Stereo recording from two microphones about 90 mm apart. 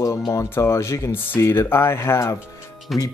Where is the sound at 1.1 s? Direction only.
25° left (ahead or behind).